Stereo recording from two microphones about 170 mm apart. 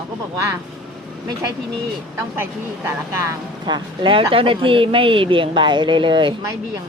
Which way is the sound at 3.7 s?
25° right (ahead or behind).